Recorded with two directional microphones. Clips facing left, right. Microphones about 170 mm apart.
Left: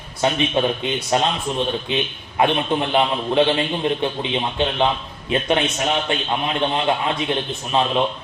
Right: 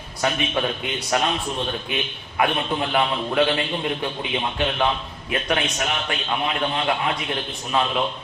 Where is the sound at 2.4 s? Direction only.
25° left (ahead or behind).